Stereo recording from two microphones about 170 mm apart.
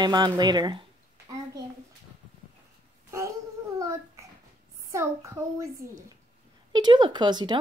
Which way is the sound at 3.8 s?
20° right (ahead or behind).